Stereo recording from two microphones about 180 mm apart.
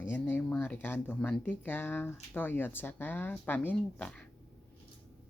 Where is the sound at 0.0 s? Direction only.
10° left (ahead or behind).